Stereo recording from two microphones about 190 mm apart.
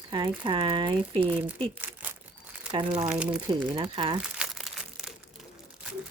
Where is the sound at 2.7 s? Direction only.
30° right (ahead or behind).